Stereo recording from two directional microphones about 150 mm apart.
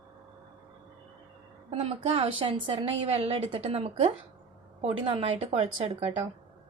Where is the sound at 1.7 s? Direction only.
45° right (ahead or behind).